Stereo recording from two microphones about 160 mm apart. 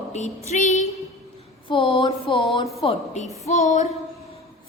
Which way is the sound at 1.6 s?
35° left (ahead or behind).